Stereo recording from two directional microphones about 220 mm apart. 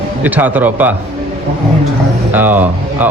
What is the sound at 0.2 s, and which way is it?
Speech, 10° right (ahead or behind).